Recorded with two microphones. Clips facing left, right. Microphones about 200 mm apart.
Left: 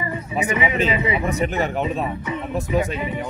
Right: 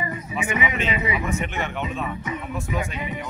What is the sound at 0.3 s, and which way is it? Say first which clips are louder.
A man's voice: left 4 dB; 35° left (ahead or behind).